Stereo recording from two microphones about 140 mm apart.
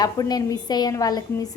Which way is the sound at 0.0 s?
30° left (ahead or behind).